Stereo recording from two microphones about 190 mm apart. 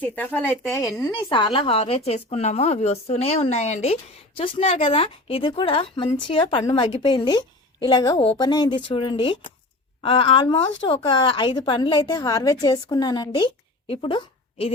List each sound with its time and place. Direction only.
0.0 s a woman's voice: 10° left (ahead or behind); by 14.2 s 30° left (ahead or behind)